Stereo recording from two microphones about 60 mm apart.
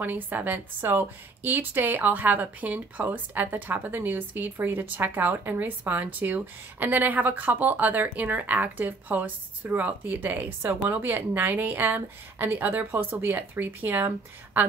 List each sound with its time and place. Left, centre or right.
0.0 s speech: right
10.6 s speech: right